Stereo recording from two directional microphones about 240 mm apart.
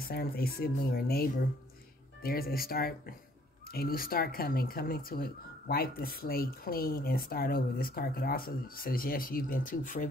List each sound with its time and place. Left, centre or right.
0.0 s speech: left